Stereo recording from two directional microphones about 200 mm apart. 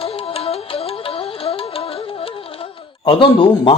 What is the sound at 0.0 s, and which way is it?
Music, 30° left (ahead or behind).